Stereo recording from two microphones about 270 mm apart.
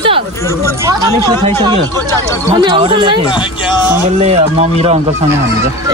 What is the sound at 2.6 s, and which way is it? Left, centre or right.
Speech, centre.